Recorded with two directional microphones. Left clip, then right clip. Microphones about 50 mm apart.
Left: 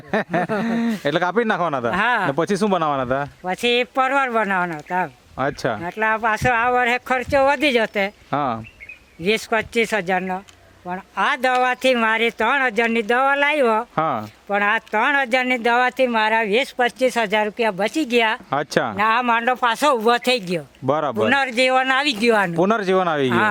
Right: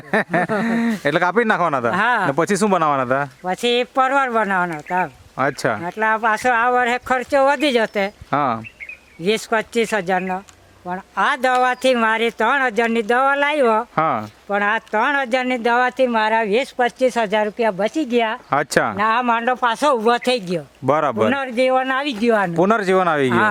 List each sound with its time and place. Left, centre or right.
0.1 s speech: centre; by 18.2 s left
18.5 s speech: right
18.9 s a man's voice: centre
20.8 s speech: right
21.2 s a man's voice: left
22.2 s speech: left
22.5 s speech: centre